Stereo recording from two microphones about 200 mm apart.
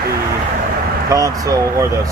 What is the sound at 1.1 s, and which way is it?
Speech, 15° right (ahead or behind).